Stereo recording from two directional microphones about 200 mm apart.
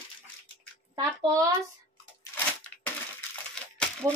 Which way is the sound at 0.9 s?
20° right (ahead or behind).